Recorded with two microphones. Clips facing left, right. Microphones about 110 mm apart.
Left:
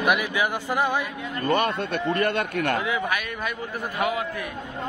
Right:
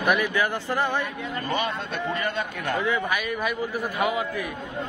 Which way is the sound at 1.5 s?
55° left (ahead or behind).